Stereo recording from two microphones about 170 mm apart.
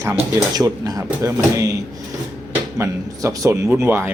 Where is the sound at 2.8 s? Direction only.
20° right (ahead or behind).